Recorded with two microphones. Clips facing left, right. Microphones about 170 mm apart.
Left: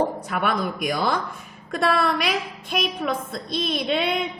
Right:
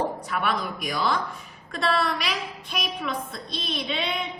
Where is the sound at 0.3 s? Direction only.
50° left (ahead or behind).